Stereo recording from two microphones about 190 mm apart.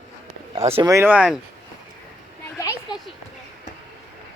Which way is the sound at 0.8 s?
15° right (ahead or behind).